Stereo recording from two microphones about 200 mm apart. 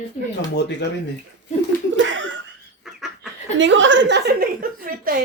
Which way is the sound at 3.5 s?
65° right (ahead or behind).